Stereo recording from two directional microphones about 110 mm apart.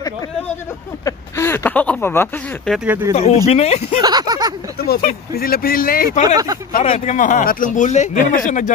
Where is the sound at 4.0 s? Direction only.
40° right (ahead or behind).